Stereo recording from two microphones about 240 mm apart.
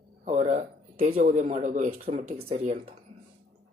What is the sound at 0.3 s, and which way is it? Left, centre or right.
Speech, right.